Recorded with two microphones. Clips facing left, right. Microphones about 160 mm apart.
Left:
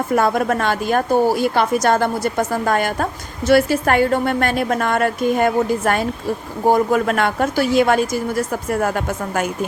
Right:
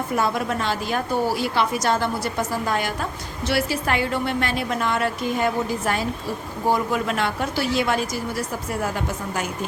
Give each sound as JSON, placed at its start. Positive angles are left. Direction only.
{"t": 0.2, "sound": "a woman's voice", "side_deg": 50}